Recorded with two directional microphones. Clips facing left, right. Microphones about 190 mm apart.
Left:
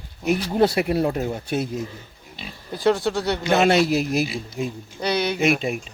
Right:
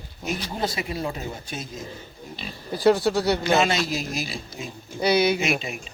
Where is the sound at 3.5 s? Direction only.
60° left (ahead or behind).